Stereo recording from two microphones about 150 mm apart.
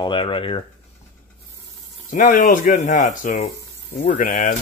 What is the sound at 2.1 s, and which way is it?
Speech, 60° left (ahead or behind).